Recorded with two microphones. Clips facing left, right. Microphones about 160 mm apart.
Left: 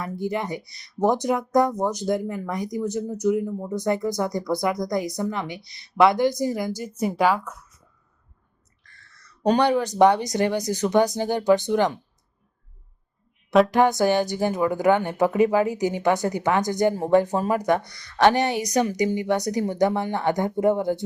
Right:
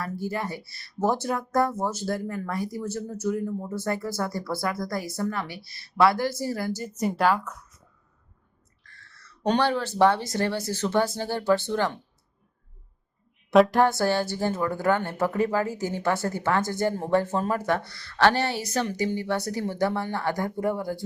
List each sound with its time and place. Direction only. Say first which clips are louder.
0.0 s speech: left 3 dB; 20° left (ahead or behind)
9.6 s speech: left 3 dB; 15° left (ahead or behind)
13.5 s a woman's voice: left 1 dB; centre (ahead or behind)
13.8 s speech: left 3 dB; 15° left (ahead or behind)